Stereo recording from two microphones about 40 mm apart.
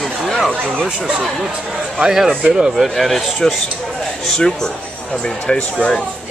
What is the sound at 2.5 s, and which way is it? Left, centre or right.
Speech, right.